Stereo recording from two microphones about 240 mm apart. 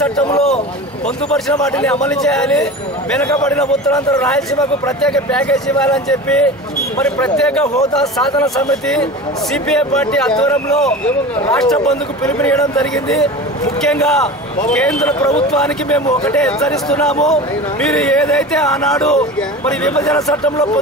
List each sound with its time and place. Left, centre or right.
0.0 s speech: centre
9.5 s speech: centre